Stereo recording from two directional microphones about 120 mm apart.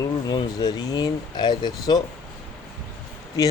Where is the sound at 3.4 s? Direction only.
30° left (ahead or behind).